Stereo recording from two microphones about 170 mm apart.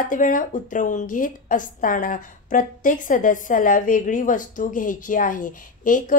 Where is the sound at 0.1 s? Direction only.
50° left (ahead or behind).